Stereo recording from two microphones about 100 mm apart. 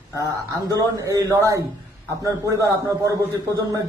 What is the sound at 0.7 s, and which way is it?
Speech, 35° right (ahead or behind).